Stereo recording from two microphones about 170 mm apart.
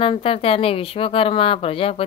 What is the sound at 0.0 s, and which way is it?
Speech, 30° left (ahead or behind).